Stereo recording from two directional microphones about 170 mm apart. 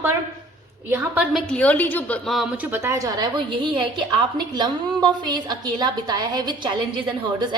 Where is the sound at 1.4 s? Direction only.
5° left (ahead or behind).